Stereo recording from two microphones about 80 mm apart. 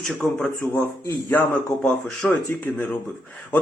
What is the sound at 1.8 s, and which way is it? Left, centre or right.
A man's voice, centre.